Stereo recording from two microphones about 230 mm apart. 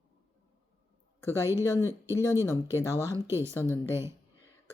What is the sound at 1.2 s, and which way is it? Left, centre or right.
Speech, centre.